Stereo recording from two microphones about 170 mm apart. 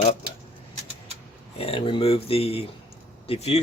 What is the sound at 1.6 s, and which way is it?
Speech, 35° left (ahead or behind).